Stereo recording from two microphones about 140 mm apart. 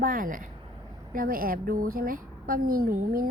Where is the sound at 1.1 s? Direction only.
90° right.